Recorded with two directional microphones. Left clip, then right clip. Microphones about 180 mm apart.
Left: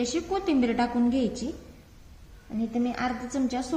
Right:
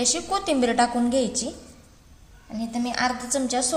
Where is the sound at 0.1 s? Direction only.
55° right (ahead or behind).